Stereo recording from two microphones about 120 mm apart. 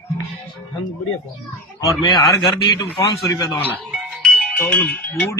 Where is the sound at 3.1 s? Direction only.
35° left (ahead or behind).